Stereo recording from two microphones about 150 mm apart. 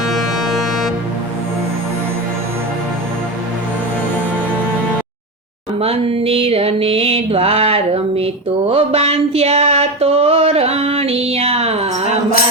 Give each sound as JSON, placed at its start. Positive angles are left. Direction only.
{"t": 0.0, "sound": "music", "side_deg": 0}
{"t": 5.8, "sound": "music", "side_deg": -40}